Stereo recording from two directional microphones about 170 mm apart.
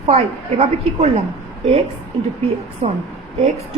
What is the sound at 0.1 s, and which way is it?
A woman's voice, 40° right (ahead or behind).